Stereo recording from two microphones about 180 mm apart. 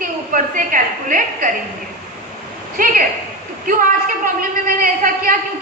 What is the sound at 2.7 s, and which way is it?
Speech, 50° right (ahead or behind).